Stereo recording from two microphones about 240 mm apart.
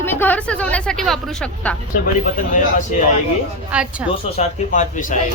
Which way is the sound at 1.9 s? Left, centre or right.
Left.